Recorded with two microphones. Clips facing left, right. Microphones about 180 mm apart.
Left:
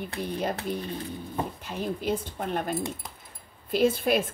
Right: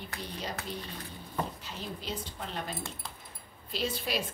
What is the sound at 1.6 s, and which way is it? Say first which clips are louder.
A woman's voice: left 9 dB; 55° left (ahead or behind).